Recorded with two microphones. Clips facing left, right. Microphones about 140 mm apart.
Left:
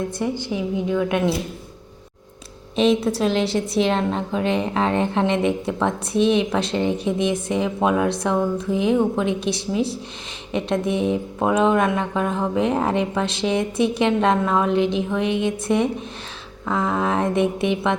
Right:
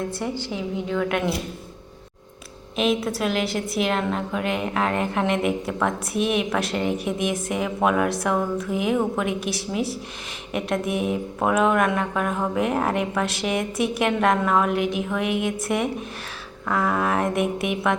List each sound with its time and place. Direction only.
0.2 s speech: 15° left (ahead or behind)
2.7 s speech: 30° left (ahead or behind)